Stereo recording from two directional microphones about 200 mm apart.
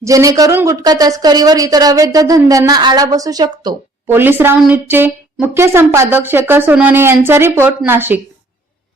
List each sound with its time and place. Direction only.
0.0 s a woman's voice: 15° right (ahead or behind)